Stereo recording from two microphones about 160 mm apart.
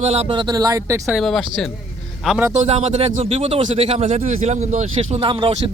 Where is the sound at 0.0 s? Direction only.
40° right (ahead or behind); by 1.0 s 20° right (ahead or behind).